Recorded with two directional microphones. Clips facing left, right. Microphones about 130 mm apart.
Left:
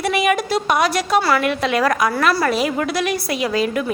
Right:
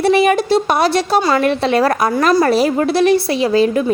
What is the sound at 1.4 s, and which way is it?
A woman's voice, 30° right (ahead or behind).